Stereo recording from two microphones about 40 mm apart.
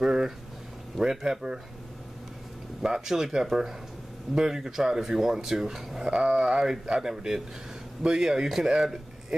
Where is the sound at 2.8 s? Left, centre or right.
Centre.